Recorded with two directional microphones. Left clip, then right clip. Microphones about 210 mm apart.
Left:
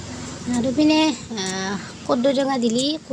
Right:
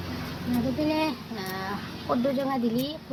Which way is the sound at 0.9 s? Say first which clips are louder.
Left 8 dB; 30° left (ahead or behind).